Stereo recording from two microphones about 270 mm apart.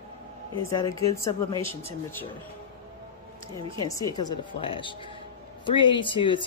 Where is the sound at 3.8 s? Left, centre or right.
Centre.